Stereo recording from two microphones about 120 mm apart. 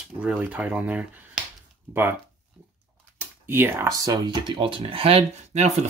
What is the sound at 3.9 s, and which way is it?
Speech, 30° right (ahead or behind).